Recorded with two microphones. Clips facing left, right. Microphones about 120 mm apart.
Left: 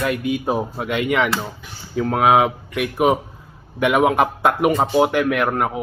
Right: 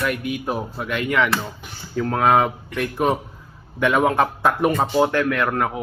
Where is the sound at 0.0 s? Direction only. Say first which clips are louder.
Left 3 dB; 25° left (ahead or behind).